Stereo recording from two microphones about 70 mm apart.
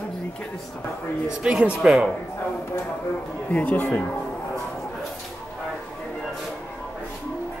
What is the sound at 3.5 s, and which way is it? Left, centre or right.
Speech, left.